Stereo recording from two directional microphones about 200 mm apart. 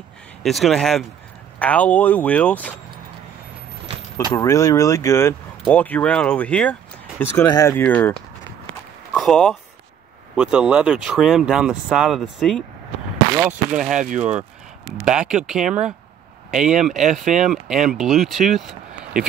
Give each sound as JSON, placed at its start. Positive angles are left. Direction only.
{"t": 0.4, "sound": "speech", "side_deg": 0}
{"t": 4.3, "sound": "speech", "side_deg": 15}
{"t": 17.1, "sound": "speech", "side_deg": -35}
{"t": 17.5, "sound": "speech", "side_deg": 0}
{"t": 18.5, "sound": "a sound", "side_deg": 0}